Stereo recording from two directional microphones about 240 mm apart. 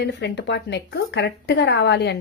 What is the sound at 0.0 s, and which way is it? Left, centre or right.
A woman's voice, left.